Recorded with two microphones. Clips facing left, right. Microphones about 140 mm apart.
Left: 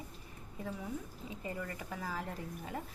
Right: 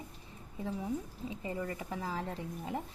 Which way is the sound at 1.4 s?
25° right (ahead or behind).